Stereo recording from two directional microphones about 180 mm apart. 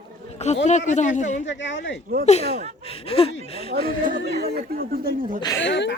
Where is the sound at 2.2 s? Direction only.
35° left (ahead or behind).